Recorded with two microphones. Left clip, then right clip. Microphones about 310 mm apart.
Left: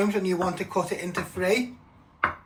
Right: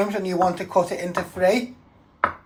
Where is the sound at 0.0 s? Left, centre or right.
Right.